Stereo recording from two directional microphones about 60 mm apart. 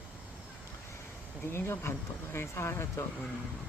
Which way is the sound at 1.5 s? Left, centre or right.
Left.